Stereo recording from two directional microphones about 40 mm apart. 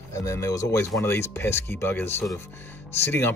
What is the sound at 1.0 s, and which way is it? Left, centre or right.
Speech, left.